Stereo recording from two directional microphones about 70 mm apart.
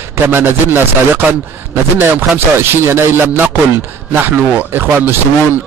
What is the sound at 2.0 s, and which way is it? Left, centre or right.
A man's voice, right.